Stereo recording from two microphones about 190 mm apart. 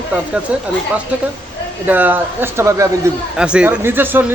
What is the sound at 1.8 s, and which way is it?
Speech, 10° right (ahead or behind).